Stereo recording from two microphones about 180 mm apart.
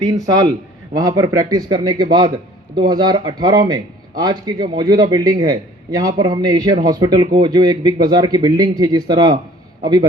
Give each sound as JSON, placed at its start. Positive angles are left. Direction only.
{"t": 0.0, "sound": "a man's voice", "side_deg": -20}